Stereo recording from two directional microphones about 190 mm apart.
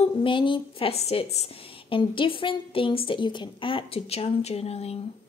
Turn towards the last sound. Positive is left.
turn(degrees=35)  # may be behind; listen again after turning